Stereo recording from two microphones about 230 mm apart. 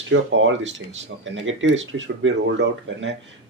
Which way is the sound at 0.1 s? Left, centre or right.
Right.